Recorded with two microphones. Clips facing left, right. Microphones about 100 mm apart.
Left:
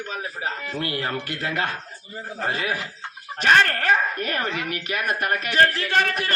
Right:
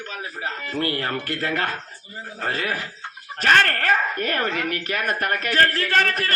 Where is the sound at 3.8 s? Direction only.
50° right (ahead or behind).